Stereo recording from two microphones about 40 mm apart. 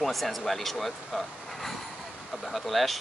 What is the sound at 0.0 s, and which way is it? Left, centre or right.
Speech, centre.